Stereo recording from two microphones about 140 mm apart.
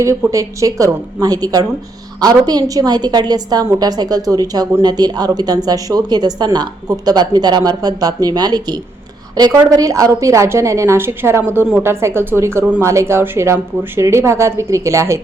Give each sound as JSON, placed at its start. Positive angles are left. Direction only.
{"t": 0.0, "sound": "a woman's voice", "side_deg": -20}